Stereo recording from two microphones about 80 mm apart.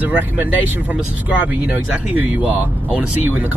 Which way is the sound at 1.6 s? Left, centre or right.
Right.